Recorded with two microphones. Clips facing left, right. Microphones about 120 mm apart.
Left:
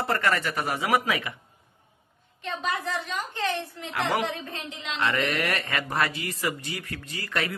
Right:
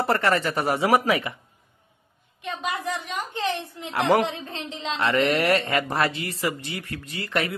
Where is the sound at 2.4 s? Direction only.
15° right (ahead or behind).